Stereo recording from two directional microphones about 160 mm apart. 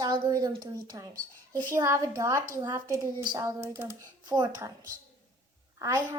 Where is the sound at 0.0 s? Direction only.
25° right (ahead or behind).